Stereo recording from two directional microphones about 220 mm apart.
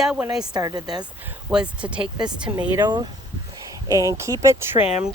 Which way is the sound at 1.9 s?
20° right (ahead or behind).